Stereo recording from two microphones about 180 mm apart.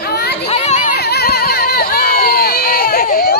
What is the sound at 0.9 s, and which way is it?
Crowd, 65° left (ahead or behind).